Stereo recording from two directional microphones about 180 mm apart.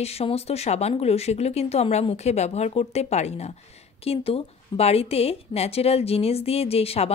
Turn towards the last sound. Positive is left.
turn(degrees=35)  # may be behind; listen again after turning